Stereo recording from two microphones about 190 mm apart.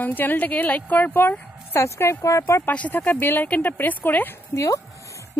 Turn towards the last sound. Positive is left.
turn(degrees=15)  # may be behind; listen again after turning